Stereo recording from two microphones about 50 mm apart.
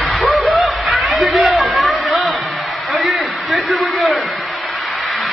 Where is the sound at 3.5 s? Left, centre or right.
Centre.